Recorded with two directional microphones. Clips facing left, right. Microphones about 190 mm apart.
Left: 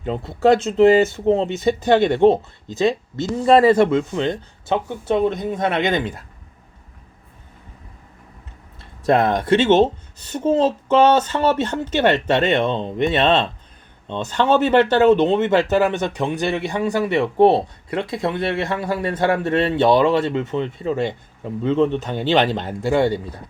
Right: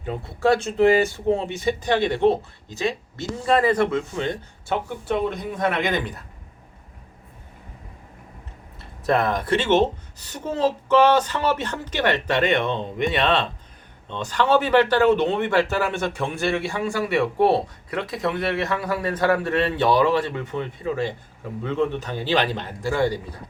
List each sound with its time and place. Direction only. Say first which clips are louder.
0.0 s speech: left 5 dB; 25° left (ahead or behind)
2.6 s speech: left 7 dB; 20° left (ahead or behind)
9.0 s speech: left 5 dB; 25° left (ahead or behind)